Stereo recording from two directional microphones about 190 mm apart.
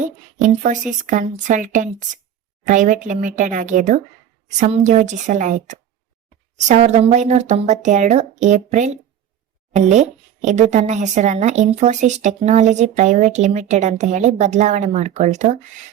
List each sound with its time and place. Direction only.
0.0 s a woman's voice: 40° right (ahead or behind)